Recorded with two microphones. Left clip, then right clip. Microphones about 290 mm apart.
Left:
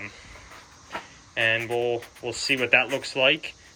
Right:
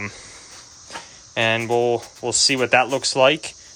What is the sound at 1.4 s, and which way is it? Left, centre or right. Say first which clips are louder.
Speech: right 5 dB; centre.